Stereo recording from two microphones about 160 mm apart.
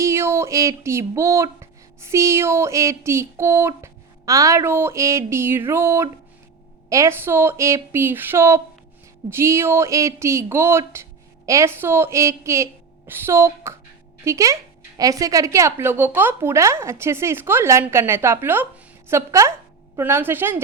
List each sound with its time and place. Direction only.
0.0 s speech: 15° right (ahead or behind)